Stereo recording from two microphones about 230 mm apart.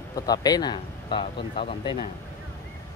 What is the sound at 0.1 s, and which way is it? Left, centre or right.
Speech, centre.